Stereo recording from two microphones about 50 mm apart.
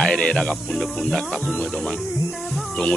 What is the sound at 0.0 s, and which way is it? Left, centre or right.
Speech, centre.